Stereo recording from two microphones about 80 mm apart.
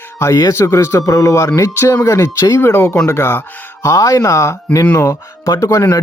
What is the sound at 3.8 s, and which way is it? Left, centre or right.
Speech, left.